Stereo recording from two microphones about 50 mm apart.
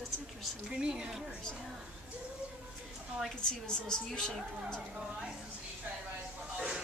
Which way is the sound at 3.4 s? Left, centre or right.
Centre.